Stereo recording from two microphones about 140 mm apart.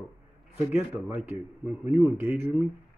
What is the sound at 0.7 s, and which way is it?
Speech, 15° right (ahead or behind).